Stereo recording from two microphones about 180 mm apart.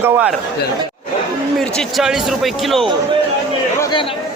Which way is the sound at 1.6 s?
Centre (ahead or behind).